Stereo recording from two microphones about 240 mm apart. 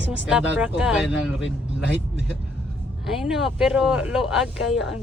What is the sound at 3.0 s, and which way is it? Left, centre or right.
Speech, centre.